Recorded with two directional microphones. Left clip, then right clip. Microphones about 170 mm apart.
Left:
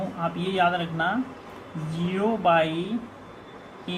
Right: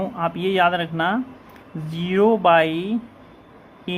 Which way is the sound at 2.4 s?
50° right (ahead or behind).